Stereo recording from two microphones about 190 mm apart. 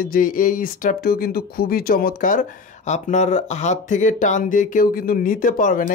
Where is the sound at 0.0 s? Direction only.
45° left (ahead or behind).